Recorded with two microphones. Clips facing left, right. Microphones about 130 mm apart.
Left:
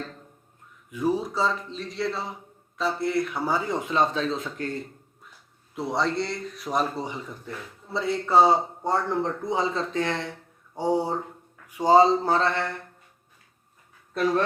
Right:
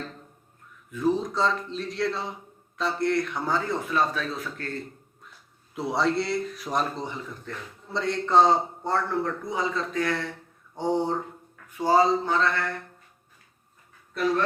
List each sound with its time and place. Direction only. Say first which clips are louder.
0.9 s a man's voice: right 1 dB; 15° left (ahead or behind)
5.7 s speech: right 1 dB; centre (ahead or behind)
7.0 s a man's voice: left 1 dB; 15° left (ahead or behind)
10.8 s a man's voice: left 1 dB; 10° left (ahead or behind)
11.7 s a sound: left 3 dB; 20° left (ahead or behind)